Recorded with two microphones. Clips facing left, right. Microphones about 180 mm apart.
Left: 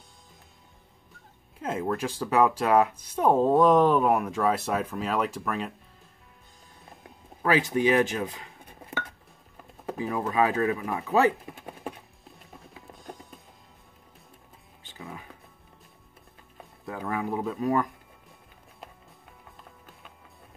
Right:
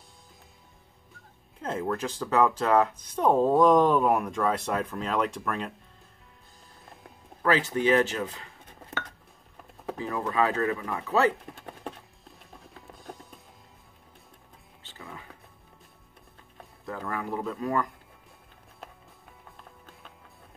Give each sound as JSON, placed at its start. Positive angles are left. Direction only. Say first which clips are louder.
{"t": 1.6, "sound": "speech", "louder": "left 1 dB", "side_deg": 10}
{"t": 7.4, "sound": "speech", "louder": "left 1 dB", "side_deg": 15}
{"t": 11.5, "sound": "music", "louder": "left 2 dB", "side_deg": 10}
{"t": 14.8, "sound": "music", "louder": "left 3 dB", "side_deg": 15}
{"t": 16.5, "sound": "music", "louder": "even", "side_deg": 10}
{"t": 17.6, "sound": "speech", "louder": "left 3 dB", "side_deg": 15}